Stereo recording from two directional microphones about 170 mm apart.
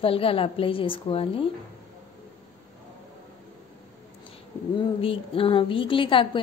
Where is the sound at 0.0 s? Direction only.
35° left (ahead or behind).